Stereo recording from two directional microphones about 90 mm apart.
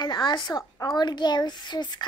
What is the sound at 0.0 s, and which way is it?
A child's voice, 50° left (ahead or behind).